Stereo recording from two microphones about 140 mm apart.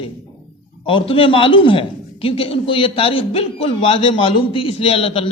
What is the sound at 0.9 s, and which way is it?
A man's voice, 40° left (ahead or behind).